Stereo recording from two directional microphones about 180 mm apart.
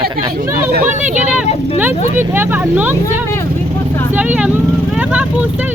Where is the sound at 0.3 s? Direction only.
50° right (ahead or behind).